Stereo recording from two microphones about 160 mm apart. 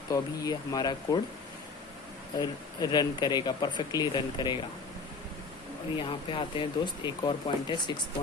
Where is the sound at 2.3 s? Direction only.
25° left (ahead or behind).